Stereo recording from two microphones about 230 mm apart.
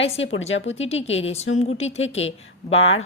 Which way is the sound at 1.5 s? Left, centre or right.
Left.